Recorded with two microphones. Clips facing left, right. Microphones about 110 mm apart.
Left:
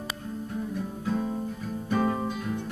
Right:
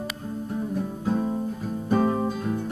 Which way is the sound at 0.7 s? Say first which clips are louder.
Right 4 dB; 30° right (ahead or behind).